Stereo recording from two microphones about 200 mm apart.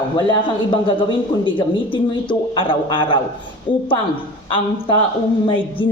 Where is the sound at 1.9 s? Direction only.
25° left (ahead or behind).